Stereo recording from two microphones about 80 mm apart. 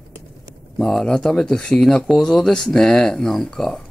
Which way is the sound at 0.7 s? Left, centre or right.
Centre.